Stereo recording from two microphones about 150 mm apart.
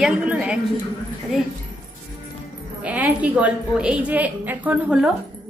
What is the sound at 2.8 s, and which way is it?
A woman's voice, 10° right (ahead or behind).